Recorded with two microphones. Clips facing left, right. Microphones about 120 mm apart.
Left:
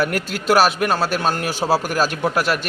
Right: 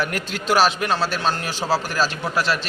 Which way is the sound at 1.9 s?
50° left (ahead or behind).